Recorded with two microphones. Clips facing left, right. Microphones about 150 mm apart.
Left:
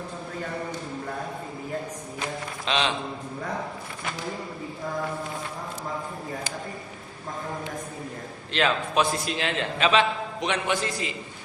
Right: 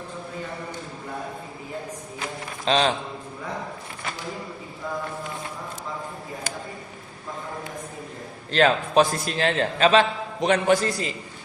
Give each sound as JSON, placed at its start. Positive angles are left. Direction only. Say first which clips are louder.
{"t": 2.6, "sound": "a man's voice", "louder": "right 5 dB", "side_deg": -40}
{"t": 8.5, "sound": "a man's voice", "louder": "right 5 dB", "side_deg": -40}